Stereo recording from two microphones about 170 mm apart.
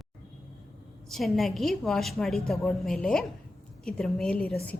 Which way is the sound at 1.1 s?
Centre (ahead or behind).